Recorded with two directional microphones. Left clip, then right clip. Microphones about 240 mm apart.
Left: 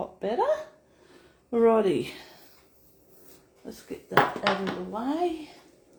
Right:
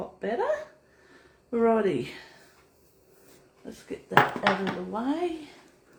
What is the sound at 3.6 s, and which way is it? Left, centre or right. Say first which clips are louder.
Speech: right 1 dB; centre.